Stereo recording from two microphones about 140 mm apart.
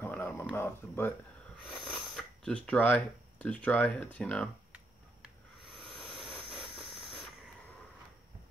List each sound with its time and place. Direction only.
0.0 s a sound: 15° left (ahead or behind)
0.6 s speech: 15° left (ahead or behind)
2.1 s speech: 5° left (ahead or behind)
5.9 s jet engine: centre (ahead or behind)